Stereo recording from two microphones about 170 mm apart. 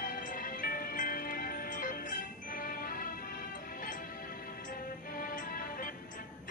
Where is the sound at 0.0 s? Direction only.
55° left (ahead or behind).